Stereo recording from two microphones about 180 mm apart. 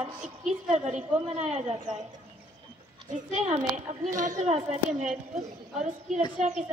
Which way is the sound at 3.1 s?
40° right (ahead or behind).